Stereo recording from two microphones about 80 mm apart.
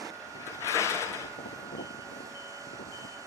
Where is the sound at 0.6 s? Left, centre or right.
Left.